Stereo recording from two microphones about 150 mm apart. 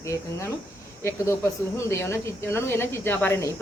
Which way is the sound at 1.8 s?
20° left (ahead or behind).